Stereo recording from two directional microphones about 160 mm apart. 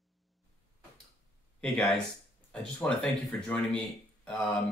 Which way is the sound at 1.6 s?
5° left (ahead or behind).